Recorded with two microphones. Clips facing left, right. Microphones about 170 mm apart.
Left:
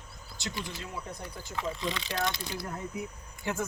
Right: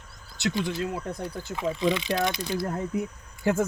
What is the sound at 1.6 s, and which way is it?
Speech, 15° right (ahead or behind).